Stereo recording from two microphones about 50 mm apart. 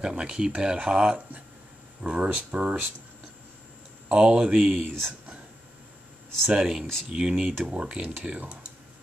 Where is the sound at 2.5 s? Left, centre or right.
Right.